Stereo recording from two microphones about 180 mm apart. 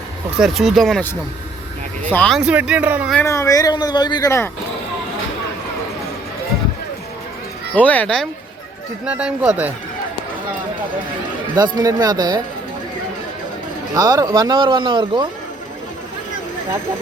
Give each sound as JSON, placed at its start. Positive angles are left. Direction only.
{"t": 0.3, "sound": "speech", "side_deg": 0}
{"t": 2.0, "sound": "speech", "side_deg": 5}
{"t": 2.4, "sound": "speech", "side_deg": -5}
{"t": 3.2, "sound": "speech", "side_deg": 15}
{"t": 7.8, "sound": "speech", "side_deg": 10}
{"t": 11.5, "sound": "speech", "side_deg": -20}
{"t": 13.9, "sound": "speech", "side_deg": -20}